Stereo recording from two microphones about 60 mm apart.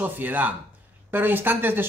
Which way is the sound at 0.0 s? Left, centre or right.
Right.